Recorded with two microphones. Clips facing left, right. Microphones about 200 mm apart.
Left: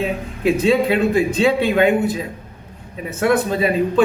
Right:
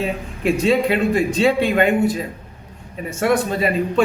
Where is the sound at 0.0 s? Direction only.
Centre (ahead or behind).